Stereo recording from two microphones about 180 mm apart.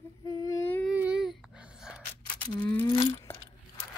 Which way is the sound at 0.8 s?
5° right (ahead or behind).